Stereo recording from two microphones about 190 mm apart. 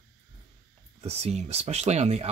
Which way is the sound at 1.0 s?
35° right (ahead or behind).